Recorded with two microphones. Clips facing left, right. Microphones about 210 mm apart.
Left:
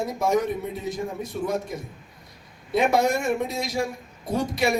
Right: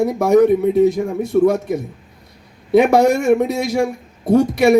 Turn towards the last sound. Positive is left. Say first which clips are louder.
# right 11 dB
turn(degrees=-65)  # may be behind; listen again after turning